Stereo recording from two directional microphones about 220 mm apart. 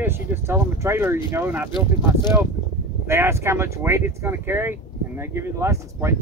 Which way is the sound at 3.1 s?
10° right (ahead or behind).